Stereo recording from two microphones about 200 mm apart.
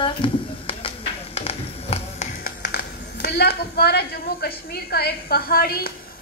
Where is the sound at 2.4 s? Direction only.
55° left (ahead or behind).